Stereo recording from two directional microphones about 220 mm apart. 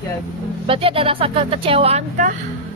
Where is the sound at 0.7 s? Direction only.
25° right (ahead or behind).